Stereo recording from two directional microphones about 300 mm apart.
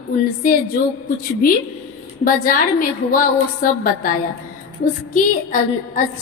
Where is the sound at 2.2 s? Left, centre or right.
Left.